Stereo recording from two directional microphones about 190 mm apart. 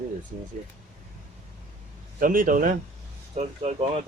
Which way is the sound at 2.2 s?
45° right (ahead or behind).